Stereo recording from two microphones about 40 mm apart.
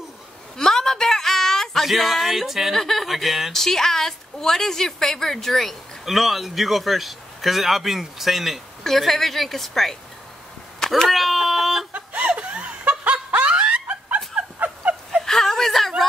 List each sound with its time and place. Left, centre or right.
0.6 s a sound: centre
1.9 s a woman's voice: centre
2.7 s a woman's voice: centre
3.5 s a woman's voice: centre
11.1 s a sound: centre
11.9 s snicker: right
15.2 s whimper: centre